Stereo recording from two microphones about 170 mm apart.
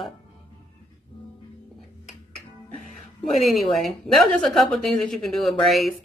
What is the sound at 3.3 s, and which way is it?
A woman's voice, centre (ahead or behind).